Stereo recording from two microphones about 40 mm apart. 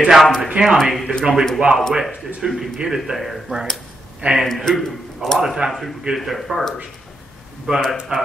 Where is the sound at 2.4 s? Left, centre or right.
Centre.